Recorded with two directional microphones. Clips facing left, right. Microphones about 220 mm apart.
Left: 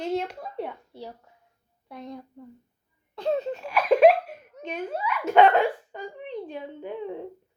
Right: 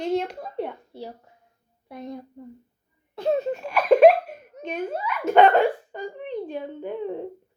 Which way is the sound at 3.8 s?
45° right (ahead or behind).